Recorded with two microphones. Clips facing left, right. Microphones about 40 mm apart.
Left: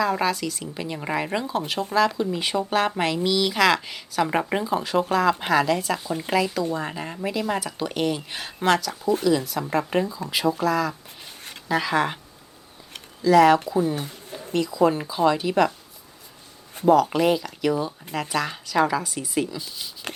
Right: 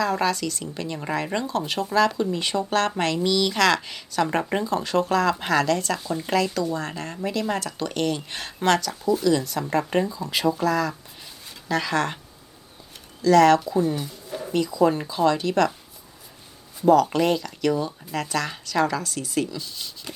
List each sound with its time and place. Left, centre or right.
0.0 s speech: centre
13.2 s speech: centre
13.9 s a sound: left
14.5 s speech: centre
16.8 s speech: centre
20.1 s a sound: left